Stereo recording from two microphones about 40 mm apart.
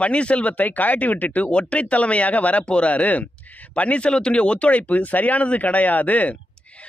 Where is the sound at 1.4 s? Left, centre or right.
Left.